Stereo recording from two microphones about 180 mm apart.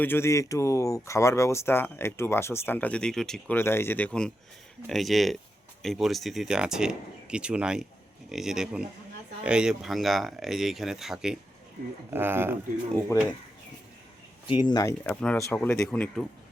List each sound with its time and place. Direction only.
0.0 s speech: 15° left (ahead or behind); by 12.5 s 10° right (ahead or behind)
14.4 s speech: 25° left (ahead or behind)
15.0 s speech: 5° left (ahead or behind)